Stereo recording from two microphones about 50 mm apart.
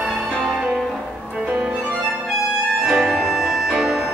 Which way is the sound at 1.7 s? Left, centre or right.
Right.